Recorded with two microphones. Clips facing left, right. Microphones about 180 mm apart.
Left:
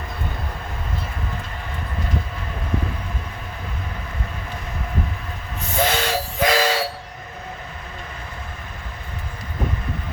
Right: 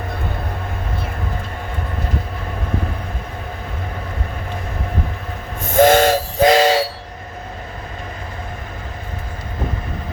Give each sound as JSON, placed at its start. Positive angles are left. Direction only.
{"t": 5.7, "sound": "steam whistle", "side_deg": -50}
{"t": 6.4, "sound": "whistle", "side_deg": -30}